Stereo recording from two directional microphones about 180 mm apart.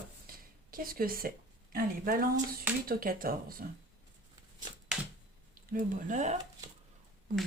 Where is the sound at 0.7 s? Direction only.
55° right (ahead or behind).